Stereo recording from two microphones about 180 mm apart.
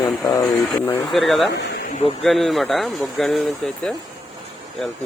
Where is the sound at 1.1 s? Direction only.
Centre (ahead or behind).